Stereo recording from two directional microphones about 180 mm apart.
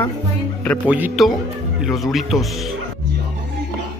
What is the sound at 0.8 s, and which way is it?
Speech, 10° right (ahead or behind).